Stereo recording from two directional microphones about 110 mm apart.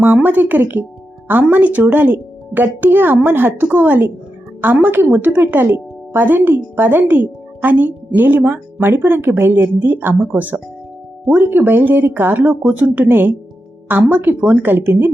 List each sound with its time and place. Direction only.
0.0 s a woman's voice: 15° right (ahead or behind)